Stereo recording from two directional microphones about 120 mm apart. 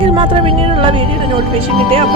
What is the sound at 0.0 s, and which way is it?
Speech, 45° right (ahead or behind).